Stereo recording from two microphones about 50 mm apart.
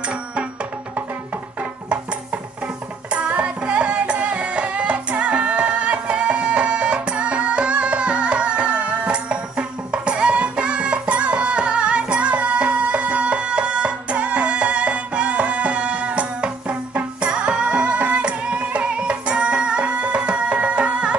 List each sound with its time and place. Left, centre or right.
1.6 s music: right